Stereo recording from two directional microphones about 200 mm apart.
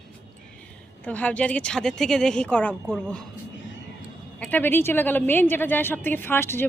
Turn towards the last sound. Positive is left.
turn(degrees=10)  # may be behind; listen again after turning